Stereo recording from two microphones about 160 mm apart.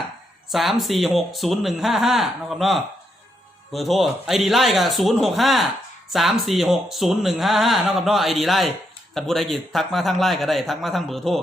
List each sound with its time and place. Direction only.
0.5 s speech: centre (ahead or behind)